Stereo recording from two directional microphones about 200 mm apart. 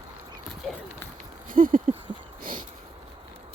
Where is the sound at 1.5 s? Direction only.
45° right (ahead or behind).